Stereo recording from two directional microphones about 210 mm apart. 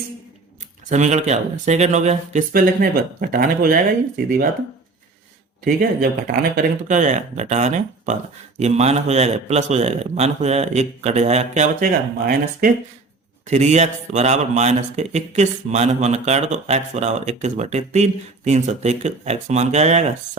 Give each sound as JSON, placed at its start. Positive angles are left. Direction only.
{"t": 0.9, "sound": "speech", "side_deg": -35}
{"t": 5.6, "sound": "speech", "side_deg": -45}
{"t": 13.5, "sound": "speech", "side_deg": -35}